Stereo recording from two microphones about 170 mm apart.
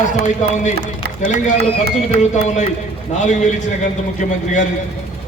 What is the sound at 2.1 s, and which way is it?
A man's voice, 45° left (ahead or behind).